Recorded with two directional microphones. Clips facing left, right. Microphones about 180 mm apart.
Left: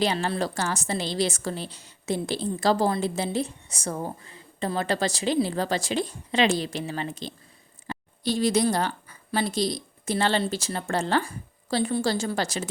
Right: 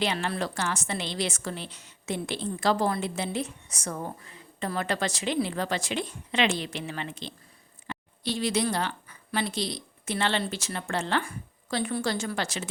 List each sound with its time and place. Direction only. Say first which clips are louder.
0.0 s a woman's voice: left 3 dB; 35° left (ahead or behind)